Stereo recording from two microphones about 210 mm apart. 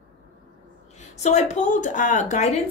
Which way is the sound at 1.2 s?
35° left (ahead or behind).